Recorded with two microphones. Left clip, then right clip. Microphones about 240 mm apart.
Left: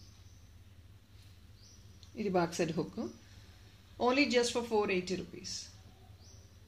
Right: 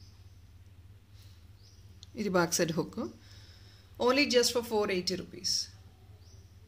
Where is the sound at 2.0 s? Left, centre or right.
Right.